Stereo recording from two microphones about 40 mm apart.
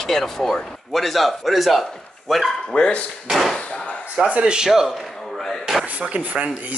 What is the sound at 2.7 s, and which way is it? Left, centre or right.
Speech, left.